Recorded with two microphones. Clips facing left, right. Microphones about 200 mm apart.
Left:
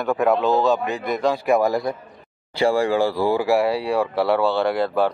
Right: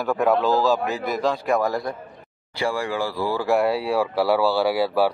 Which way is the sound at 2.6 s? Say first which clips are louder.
Left 6 dB; 25° left (ahead or behind).